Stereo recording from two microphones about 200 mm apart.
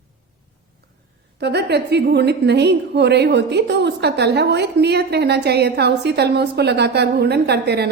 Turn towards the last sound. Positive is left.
turn(degrees=-55)  # may be behind; listen again after turning